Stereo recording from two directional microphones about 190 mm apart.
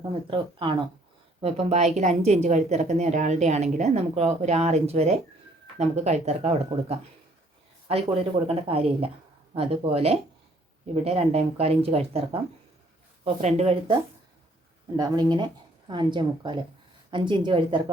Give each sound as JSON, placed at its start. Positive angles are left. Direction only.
{"t": 0.1, "sound": "a woman's voice", "side_deg": -25}
{"t": 8.4, "sound": "a woman's voice", "side_deg": -30}
{"t": 14.9, "sound": "a woman's voice", "side_deg": -20}